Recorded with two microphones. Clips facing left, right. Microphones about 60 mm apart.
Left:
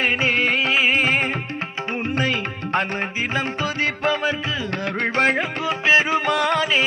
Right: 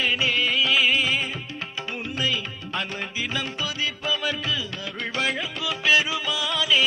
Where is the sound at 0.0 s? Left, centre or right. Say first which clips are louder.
Left 4 dB; left.